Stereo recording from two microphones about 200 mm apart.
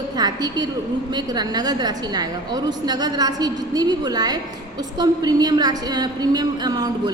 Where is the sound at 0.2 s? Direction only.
20° right (ahead or behind).